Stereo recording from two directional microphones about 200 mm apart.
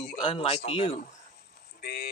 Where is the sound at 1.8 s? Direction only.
55° left (ahead or behind).